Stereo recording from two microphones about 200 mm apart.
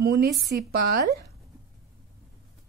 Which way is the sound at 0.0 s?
55° right (ahead or behind).